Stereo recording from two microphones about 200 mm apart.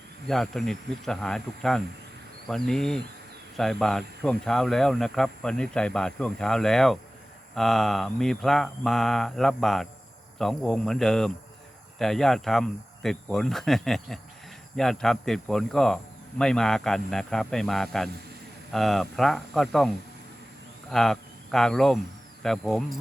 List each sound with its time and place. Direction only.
0.3 s speech: centre (ahead or behind)
20.9 s speech: centre (ahead or behind)